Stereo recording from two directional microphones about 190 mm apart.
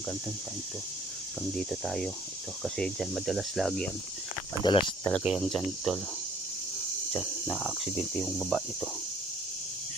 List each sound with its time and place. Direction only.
1.5 s speech: centre (ahead or behind)
4.6 s speech: 25° left (ahead or behind)
5.2 s speech: centre (ahead or behind)
7.4 s speech: 5° left (ahead or behind)